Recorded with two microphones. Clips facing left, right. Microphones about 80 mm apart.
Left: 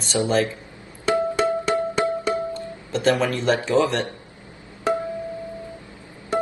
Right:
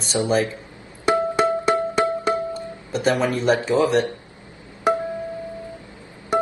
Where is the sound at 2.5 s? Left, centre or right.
Centre.